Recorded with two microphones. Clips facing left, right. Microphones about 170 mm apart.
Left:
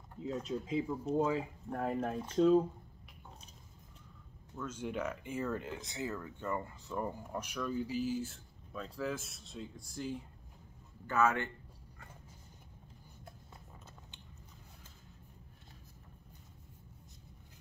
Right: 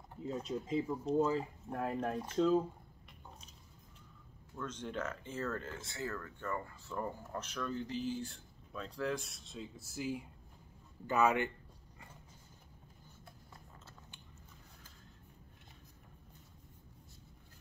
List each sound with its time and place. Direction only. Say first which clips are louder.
0.2 s speech: left 1 dB; centre (ahead or behind)
4.6 s speech: left 2 dB; 10° left (ahead or behind)
11.1 s speech: right 1 dB; 15° right (ahead or behind)